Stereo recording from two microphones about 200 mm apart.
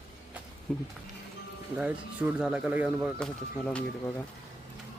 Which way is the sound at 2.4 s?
5° right (ahead or behind).